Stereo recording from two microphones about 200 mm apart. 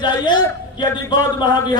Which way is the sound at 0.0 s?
20° left (ahead or behind).